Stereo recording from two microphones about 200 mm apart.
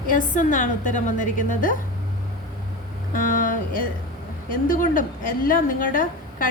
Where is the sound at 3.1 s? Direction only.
40° left (ahead or behind).